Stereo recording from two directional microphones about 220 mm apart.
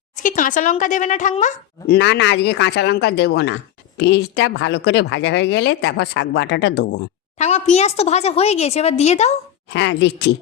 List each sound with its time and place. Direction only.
0.2 s speech: 35° left (ahead or behind)
2.0 s speech: 50° left (ahead or behind)
7.3 s a woman's voice: 30° left (ahead or behind)
9.6 s speech: 55° left (ahead or behind)